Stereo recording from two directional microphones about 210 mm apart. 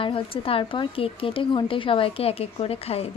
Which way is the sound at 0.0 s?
25° left (ahead or behind).